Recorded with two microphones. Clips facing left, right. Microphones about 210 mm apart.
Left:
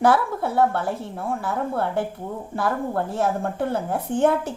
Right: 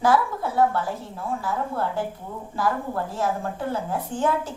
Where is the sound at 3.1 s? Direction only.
60° left (ahead or behind).